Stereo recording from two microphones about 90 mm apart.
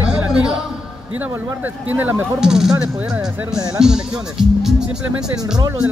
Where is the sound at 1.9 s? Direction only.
20° right (ahead or behind).